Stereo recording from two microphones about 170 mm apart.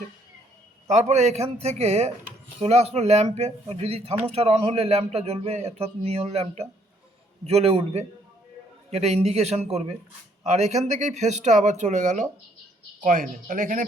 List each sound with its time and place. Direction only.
0.9 s a man's voice: 40° right (ahead or behind)